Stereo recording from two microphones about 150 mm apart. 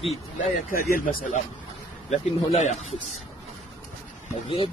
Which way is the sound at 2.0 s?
50° left (ahead or behind).